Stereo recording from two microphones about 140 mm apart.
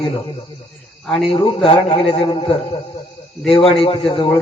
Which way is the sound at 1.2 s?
40° left (ahead or behind).